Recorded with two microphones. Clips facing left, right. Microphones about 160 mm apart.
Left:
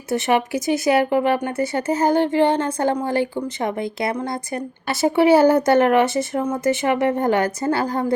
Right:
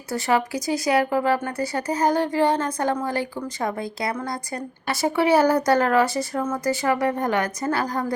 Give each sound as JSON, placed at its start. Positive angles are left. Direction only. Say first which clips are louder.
{"t": 0.1, "sound": "speech", "louder": "left 3 dB", "side_deg": 25}